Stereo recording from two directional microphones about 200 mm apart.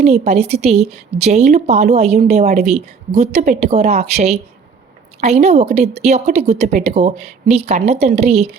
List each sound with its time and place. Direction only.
0.0 s speech: 35° right (ahead or behind)